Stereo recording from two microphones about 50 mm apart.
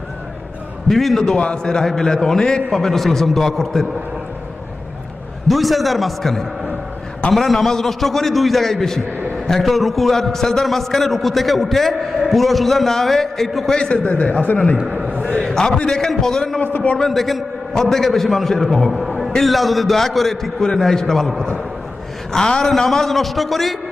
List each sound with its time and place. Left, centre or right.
0.9 s a man's voice: centre
5.5 s a man's voice: centre
13.7 s a man's voice: centre
14.1 s speech: left
15.4 s a man's voice: centre
16.7 s a man's voice: left
17.0 s a man's voice: centre
18.9 s a sound: centre
19.3 s a man's voice: centre